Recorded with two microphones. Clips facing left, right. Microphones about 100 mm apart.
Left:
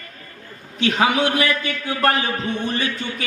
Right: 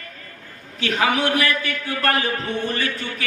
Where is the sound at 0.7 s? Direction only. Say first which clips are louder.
Left 2 dB; 20° left (ahead or behind).